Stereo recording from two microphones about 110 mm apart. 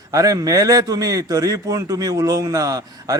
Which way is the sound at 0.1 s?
30° right (ahead or behind).